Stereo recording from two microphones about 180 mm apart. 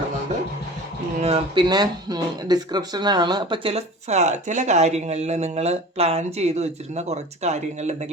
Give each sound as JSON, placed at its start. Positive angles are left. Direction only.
{"t": 1.2, "sound": "speech", "side_deg": -30}